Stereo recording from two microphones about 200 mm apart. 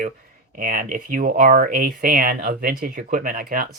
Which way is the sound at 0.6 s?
45° right (ahead or behind).